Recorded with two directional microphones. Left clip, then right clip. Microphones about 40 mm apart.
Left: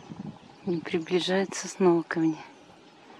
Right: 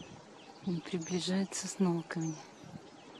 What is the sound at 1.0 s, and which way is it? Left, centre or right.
Speech, left.